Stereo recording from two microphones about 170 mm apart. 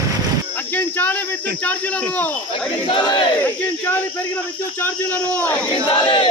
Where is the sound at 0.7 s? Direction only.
10° left (ahead or behind).